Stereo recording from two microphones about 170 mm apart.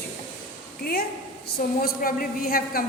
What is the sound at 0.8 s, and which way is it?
A woman's voice, 65° left (ahead or behind).